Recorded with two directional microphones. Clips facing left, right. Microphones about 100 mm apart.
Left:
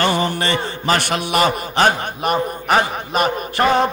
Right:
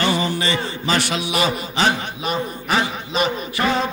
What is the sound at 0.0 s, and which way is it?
Music, 55° left (ahead or behind).